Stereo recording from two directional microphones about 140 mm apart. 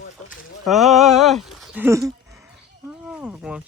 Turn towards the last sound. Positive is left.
turn(degrees=-5)  # may be behind; listen again after turning